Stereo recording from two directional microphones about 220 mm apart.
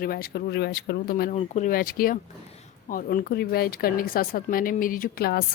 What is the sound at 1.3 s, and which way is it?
A woman's voice, 35° left (ahead or behind).